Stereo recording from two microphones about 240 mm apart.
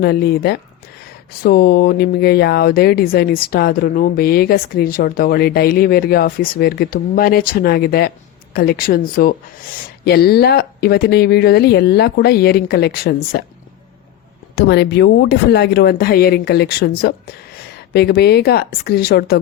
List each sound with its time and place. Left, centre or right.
0.0 s speech: left
14.5 s speech: left